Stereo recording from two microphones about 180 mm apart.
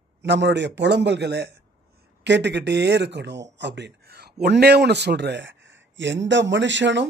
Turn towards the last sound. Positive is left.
turn(degrees=-85)